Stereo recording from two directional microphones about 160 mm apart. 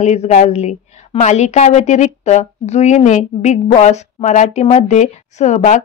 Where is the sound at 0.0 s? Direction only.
45° left (ahead or behind).